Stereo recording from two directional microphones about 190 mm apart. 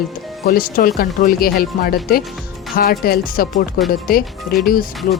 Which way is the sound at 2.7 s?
50° left (ahead or behind).